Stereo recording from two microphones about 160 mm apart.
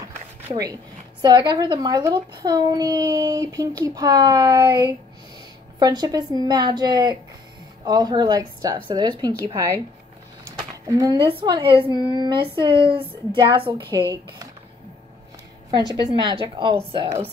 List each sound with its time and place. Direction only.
1.2 s speech: 25° right (ahead or behind)
10.9 s a woman's voice: 20° right (ahead or behind)
15.7 s speech: 25° right (ahead or behind)